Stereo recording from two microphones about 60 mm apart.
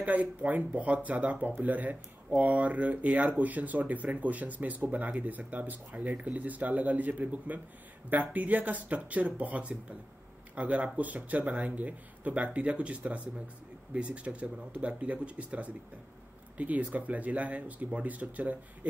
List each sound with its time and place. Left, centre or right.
0.0 s speech: right